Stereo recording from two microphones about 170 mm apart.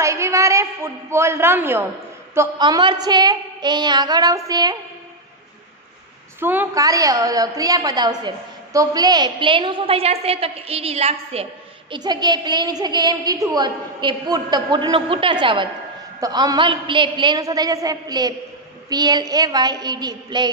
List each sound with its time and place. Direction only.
0.0 s a sound: 15° right (ahead or behind)
2.6 s a woman's voice: 25° right (ahead or behind)
6.4 s a woman's voice: 10° right (ahead or behind); by 11.4 s 35° right (ahead or behind)
11.9 s a woman's voice: 25° right (ahead or behind)